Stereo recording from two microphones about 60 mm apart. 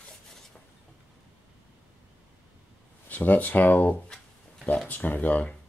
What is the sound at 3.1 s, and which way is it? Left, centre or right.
Speech, left.